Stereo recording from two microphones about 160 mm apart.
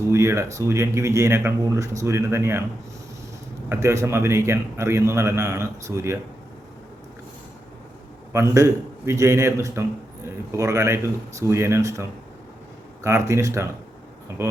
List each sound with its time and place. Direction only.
0.1 s speech: 15° right (ahead or behind)
3.7 s speech: 20° right (ahead or behind)
8.3 s speech: 15° right (ahead or behind)